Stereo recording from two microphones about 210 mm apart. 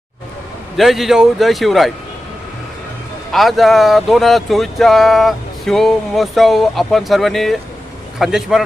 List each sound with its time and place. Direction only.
0.8 s speech: centre (ahead or behind)
3.3 s speech: centre (ahead or behind)